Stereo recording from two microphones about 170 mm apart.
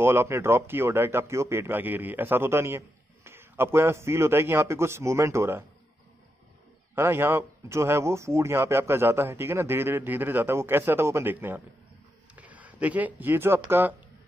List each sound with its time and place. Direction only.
0.0 s a man's voice: 15° right (ahead or behind)
7.0 s a man's voice: 15° right (ahead or behind)